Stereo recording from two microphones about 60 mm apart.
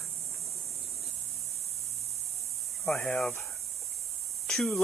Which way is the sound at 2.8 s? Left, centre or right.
Centre.